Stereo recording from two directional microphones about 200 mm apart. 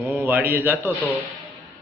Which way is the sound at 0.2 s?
10° right (ahead or behind).